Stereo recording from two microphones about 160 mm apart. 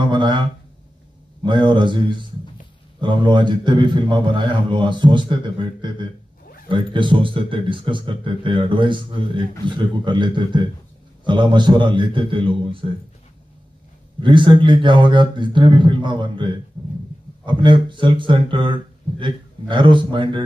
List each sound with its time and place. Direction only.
0.0 s a man's voice: 30° right (ahead or behind)
14.2 s a man's voice: 30° right (ahead or behind)